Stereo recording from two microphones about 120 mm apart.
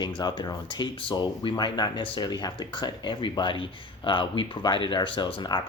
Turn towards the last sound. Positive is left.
turn(degrees=40)  # may be behind; listen again after turning